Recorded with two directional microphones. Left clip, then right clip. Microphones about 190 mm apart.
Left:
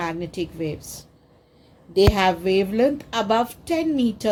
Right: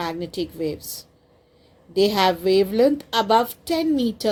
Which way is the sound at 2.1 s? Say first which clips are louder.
Right 2 dB; 35° right (ahead or behind).